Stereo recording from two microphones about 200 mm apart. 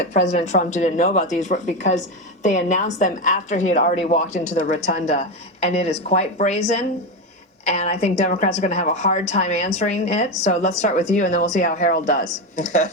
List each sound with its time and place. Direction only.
0.0 s a woman's voice: 35° left (ahead or behind)